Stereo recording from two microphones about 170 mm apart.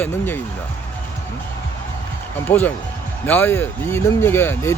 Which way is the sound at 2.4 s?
10° left (ahead or behind).